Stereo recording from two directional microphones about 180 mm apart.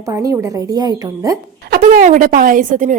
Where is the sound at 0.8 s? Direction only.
20° right (ahead or behind).